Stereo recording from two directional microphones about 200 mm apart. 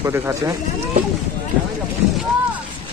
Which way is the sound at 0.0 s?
15° right (ahead or behind).